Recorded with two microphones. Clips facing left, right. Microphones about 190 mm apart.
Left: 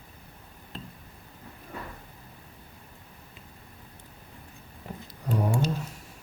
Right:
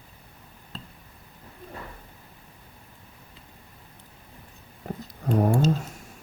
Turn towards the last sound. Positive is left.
turn(degrees=-45)  # may be behind; listen again after turning